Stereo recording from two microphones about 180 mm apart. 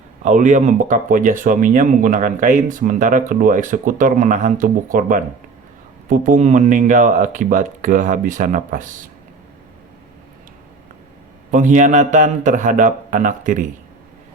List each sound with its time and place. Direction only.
0.2 s speech: 45° right (ahead or behind)
11.5 s speech: 45° right (ahead or behind)